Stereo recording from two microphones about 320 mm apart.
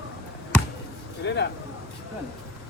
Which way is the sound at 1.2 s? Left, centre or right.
Left.